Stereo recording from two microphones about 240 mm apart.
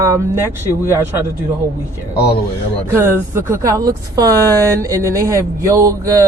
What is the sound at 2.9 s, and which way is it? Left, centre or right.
Speech, centre.